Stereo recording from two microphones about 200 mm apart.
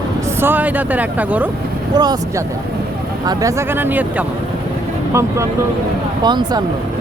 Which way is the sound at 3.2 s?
20° right (ahead or behind).